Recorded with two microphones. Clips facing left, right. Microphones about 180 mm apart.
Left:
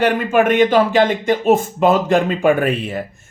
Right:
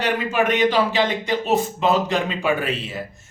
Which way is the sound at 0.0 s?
50° left (ahead or behind).